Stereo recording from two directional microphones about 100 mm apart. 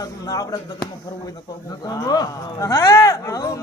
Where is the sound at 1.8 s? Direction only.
40° left (ahead or behind).